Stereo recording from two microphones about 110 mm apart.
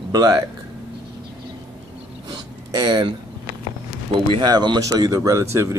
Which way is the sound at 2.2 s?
40° right (ahead or behind).